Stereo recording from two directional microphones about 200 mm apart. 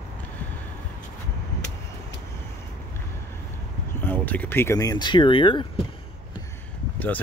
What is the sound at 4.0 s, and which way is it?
Speech, 10° left (ahead or behind).